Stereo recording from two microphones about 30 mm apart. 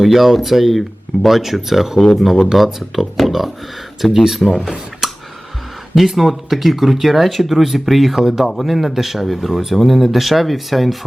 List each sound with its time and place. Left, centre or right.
0.0 s speech: centre
4.0 s speech: centre
6.0 s speech: centre